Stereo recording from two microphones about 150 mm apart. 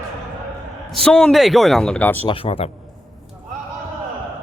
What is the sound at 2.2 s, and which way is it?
Speech, 40° left (ahead or behind).